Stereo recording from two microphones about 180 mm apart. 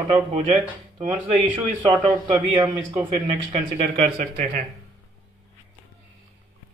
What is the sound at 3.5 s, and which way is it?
Speech, 35° right (ahead or behind).